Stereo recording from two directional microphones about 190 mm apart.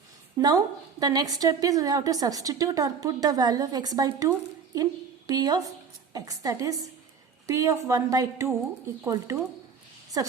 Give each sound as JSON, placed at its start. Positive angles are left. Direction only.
{"t": 0.3, "sound": "a woman's voice", "side_deg": -20}